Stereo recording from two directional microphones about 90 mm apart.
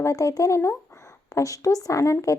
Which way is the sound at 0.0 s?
35° left (ahead or behind).